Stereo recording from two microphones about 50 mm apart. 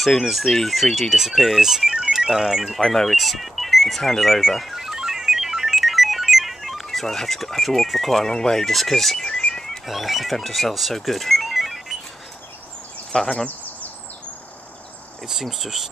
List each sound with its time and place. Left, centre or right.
0.0 s speech: centre
2.8 s speech: centre
9.8 s speech: centre
13.1 s speech: centre
15.4 s speech: centre